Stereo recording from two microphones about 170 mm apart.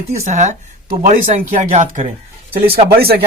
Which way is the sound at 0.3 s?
45° right (ahead or behind).